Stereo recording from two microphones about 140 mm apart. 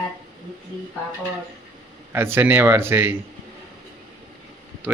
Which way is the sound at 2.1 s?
15° right (ahead or behind).